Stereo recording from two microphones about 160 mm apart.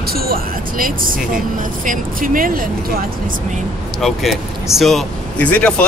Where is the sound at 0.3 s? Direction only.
60° right (ahead or behind).